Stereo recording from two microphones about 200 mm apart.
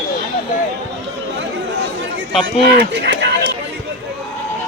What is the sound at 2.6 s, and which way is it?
Speech, 60° right (ahead or behind).